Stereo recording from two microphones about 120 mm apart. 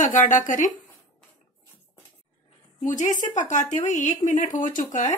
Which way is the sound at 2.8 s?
90° left.